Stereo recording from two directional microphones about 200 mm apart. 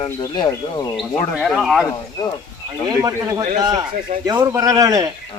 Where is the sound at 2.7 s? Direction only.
15° right (ahead or behind).